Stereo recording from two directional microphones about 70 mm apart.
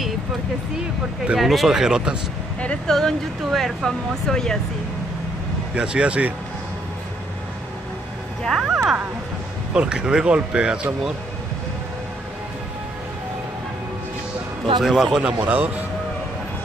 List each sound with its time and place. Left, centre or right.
1.4 s speech: centre
2.9 s speech: centre
5.8 s speech: centre
8.5 s speech: centre
8.8 s speech: right
9.8 s speech: centre
14.8 s speech: centre
15.4 s speech: right